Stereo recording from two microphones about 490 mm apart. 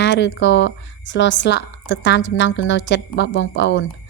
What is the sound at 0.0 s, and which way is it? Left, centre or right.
A woman's voice, left.